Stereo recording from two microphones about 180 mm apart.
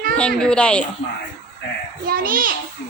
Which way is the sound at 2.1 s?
50° right (ahead or behind).